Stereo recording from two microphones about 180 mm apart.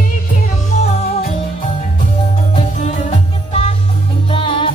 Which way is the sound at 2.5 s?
35° left (ahead or behind).